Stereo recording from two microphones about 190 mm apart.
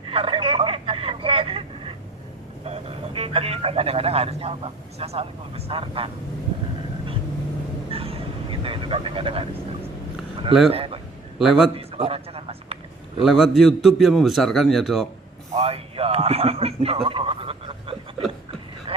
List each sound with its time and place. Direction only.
0.1 s vehicle: 30° right (ahead or behind)
2.6 s speech: 30° right (ahead or behind)
7.9 s vehicle: 30° right (ahead or behind)
10.7 s speech: 30° right (ahead or behind)
11.3 s a man's voice: centre (ahead or behind)
11.7 s a sound: 30° right (ahead or behind)
13.2 s a man's voice: centre (ahead or behind)
15.5 s a sound: 30° right (ahead or behind)
18.9 s vehicle: 30° right (ahead or behind)